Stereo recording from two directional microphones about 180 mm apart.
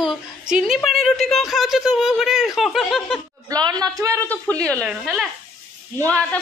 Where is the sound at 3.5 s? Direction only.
20° right (ahead or behind).